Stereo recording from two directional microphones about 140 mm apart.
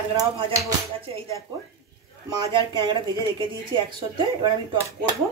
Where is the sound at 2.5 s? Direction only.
35° right (ahead or behind).